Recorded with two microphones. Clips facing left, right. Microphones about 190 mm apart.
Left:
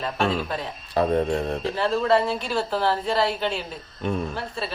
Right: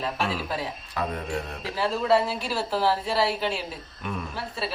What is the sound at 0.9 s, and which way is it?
Speech, 35° left (ahead or behind).